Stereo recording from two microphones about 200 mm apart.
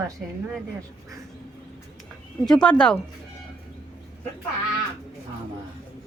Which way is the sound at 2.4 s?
5° left (ahead or behind).